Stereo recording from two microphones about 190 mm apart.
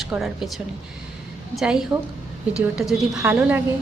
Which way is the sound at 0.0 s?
Centre (ahead or behind).